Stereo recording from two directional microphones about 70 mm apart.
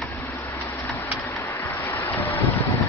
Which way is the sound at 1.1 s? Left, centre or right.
Centre.